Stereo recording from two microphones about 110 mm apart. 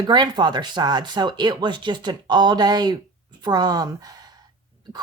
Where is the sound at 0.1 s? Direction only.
40° right (ahead or behind).